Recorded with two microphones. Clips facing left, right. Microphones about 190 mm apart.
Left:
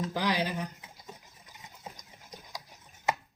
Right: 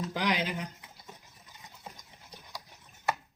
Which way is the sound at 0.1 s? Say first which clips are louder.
Left 1 dB; 20° right (ahead or behind).